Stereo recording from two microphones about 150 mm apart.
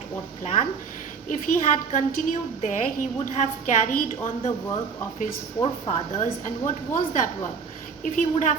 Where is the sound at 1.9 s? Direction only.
60° left (ahead or behind).